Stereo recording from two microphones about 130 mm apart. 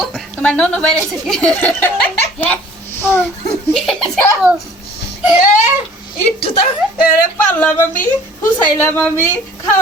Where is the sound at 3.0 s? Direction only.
20° left (ahead or behind).